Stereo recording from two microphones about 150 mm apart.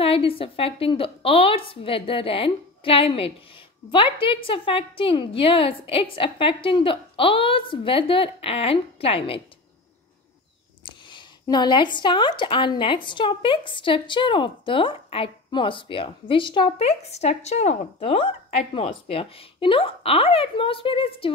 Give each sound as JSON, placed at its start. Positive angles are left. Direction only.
{"t": 0.0, "sound": "a woman's voice", "side_deg": 40}
{"t": 10.9, "sound": "a woman's voice", "side_deg": 30}